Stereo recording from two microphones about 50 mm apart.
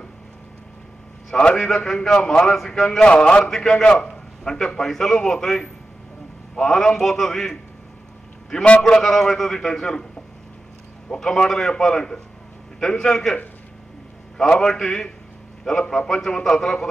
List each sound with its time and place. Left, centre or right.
1.3 s a man's voice: centre
3.0 s a man's voice: centre
3.4 s a man's voice: centre
8.6 s a man's voice: centre
11.1 s a man's voice: centre
14.4 s a man's voice: centre
16.1 s a man's voice: centre